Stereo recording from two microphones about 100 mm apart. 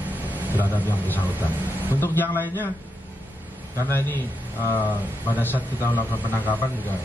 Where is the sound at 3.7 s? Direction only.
25° left (ahead or behind).